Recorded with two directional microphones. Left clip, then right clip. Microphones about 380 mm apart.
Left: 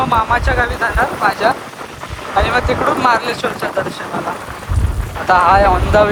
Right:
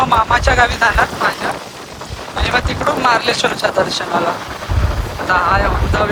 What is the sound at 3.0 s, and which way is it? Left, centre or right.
Speech, centre.